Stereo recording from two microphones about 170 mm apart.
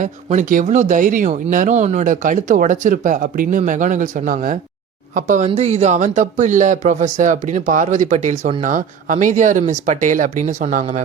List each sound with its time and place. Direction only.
0.0 s speech: 45° right (ahead or behind)